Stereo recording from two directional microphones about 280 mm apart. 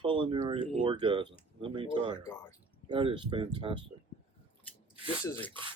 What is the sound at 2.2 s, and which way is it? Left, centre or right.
Speech, centre.